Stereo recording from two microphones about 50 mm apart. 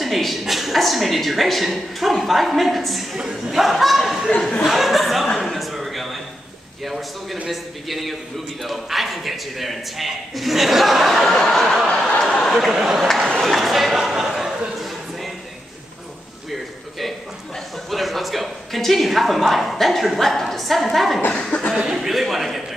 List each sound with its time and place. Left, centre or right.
0.0 s speech: centre
3.2 s a man's voice: centre
3.5 s speech: centre
4.3 s speech: centre
4.6 s chuckle: centre
6.8 s speech: centre
12.2 s a sound: centre
12.5 s a man's voice: centre
17.8 s a woman's voice: centre
21.5 s a sound: left
21.9 s speech: centre